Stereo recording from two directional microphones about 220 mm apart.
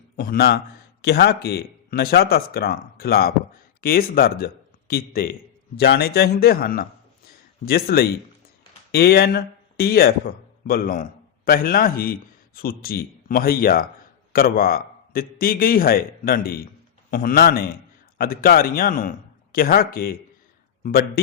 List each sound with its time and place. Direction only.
0.2 s a man's voice: 45° left (ahead or behind)